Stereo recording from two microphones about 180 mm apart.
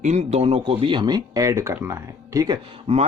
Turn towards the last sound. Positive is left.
turn(degrees=-35)  # may be behind; listen again after turning